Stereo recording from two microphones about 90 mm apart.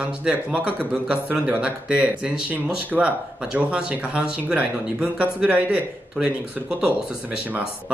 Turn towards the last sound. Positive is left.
turn(degrees=-15)  # may be behind; listen again after turning